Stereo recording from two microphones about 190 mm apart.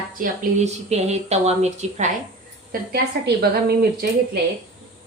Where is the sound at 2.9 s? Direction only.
55° right (ahead or behind).